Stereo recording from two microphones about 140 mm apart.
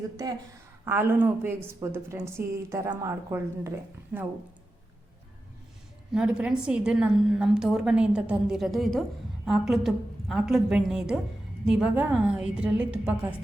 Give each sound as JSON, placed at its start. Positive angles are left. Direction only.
{"t": 0.9, "sound": "a woman's voice", "side_deg": -15}
{"t": 6.1, "sound": "a woman's voice", "side_deg": -5}